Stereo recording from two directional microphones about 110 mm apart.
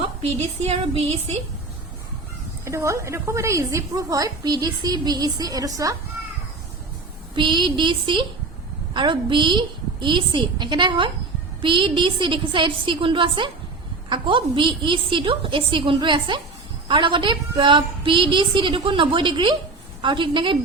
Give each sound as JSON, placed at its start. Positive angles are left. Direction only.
{"t": 0.2, "sound": "a woman's voice", "side_deg": -70}
{"t": 2.6, "sound": "a woman's voice", "side_deg": -25}
{"t": 7.3, "sound": "a woman's voice", "side_deg": -45}